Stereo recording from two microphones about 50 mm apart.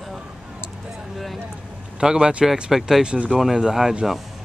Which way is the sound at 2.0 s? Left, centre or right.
Centre.